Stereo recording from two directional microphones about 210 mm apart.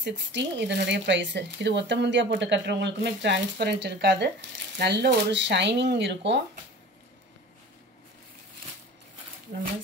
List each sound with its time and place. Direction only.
0.0 s speech: 55° right (ahead or behind)